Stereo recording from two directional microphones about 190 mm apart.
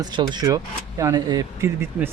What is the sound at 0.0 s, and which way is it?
Speech, 25° right (ahead or behind).